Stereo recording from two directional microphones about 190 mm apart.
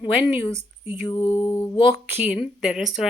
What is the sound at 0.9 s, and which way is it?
Mantra, 25° left (ahead or behind).